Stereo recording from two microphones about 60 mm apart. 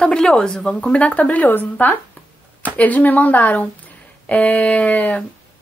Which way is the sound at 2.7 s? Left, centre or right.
Left.